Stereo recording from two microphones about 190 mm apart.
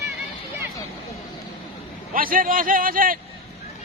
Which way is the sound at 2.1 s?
45° right (ahead or behind).